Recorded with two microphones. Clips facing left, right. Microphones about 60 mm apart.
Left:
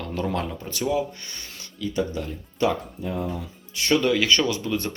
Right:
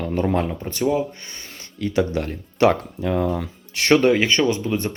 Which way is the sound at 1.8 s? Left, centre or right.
Right.